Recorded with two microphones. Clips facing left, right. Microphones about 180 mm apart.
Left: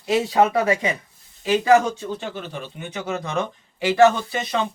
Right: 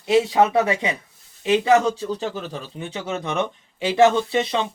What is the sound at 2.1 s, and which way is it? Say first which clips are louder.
Speech: right 3 dB; 40° right (ahead or behind).